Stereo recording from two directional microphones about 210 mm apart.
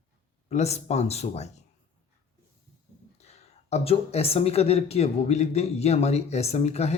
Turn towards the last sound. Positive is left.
turn(degrees=30)  # may be behind; listen again after turning